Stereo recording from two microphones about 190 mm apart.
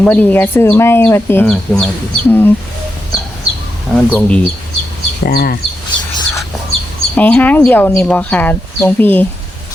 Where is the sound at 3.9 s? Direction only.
5° left (ahead or behind).